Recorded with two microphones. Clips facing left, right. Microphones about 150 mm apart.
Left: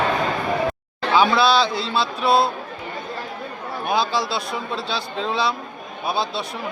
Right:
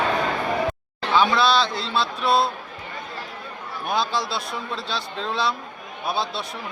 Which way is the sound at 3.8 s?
Centre (ahead or behind).